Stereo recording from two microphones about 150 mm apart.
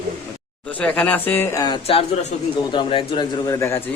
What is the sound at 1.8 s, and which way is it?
Speech, 40° left (ahead or behind).